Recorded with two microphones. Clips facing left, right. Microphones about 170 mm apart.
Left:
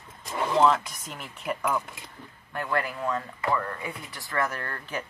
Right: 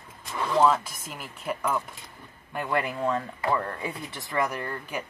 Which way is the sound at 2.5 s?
15° right (ahead or behind).